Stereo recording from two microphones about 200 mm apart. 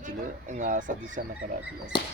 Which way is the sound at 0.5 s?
40° right (ahead or behind).